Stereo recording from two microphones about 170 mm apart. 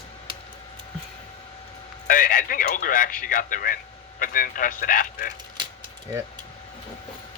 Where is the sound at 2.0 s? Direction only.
55° left (ahead or behind).